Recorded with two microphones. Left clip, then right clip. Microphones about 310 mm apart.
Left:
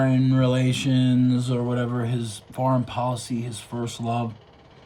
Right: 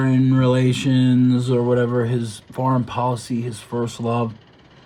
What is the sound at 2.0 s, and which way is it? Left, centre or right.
Speech, left.